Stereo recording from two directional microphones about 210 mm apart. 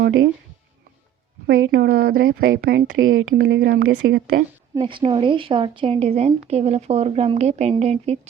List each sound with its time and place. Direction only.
1.5 s a woman's voice: 50° right (ahead or behind)
3.0 s speech: 70° right (ahead or behind)
3.3 s a woman's voice: 50° right (ahead or behind)
4.8 s a woman's voice: 25° right (ahead or behind)